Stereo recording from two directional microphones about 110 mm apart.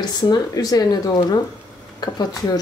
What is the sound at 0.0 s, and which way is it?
Speech, 35° left (ahead or behind).